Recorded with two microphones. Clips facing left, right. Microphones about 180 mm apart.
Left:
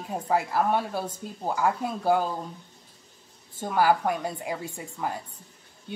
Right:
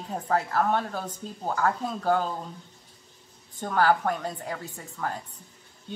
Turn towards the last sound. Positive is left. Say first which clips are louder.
# left 1 dB
turn(degrees=10)  # may be behind; listen again after turning